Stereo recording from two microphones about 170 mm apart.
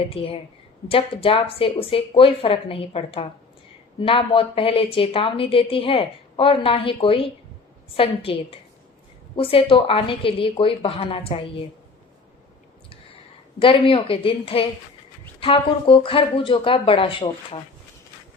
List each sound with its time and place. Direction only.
0.1 s a woman's voice: 35° left (ahead or behind)
13.6 s a woman's voice: 30° left (ahead or behind)